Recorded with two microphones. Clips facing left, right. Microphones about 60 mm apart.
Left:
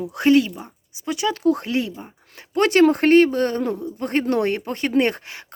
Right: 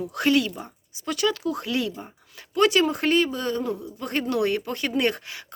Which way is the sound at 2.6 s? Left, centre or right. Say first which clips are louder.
Left 5 dB; left.